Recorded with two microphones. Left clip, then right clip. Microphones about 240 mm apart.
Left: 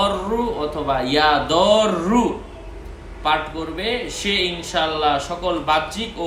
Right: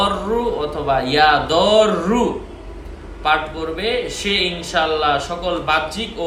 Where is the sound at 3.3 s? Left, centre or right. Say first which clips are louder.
Right 3 dB; centre.